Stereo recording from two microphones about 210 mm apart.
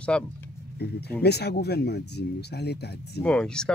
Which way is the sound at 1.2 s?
50° left (ahead or behind).